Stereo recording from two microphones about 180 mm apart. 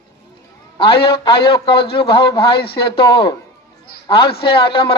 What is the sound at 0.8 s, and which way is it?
Speech, 30° left (ahead or behind).